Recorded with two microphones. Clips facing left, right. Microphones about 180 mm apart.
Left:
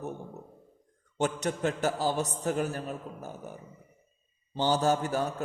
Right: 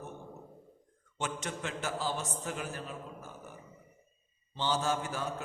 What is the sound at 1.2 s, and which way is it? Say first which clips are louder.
A man's voice: left 9 dB; 40° left (ahead or behind).